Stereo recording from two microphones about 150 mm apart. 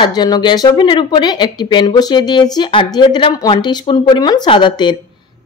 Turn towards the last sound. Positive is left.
turn(degrees=30)  # may be behind; listen again after turning